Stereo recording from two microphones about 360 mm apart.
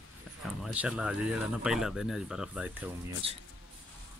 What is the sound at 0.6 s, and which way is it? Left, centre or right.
Speech, centre.